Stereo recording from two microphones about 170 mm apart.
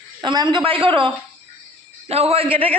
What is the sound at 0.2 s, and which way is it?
A man's voice, 25° right (ahead or behind).